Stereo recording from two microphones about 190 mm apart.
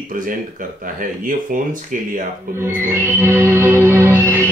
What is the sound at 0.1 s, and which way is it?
Speech, 45° right (ahead or behind).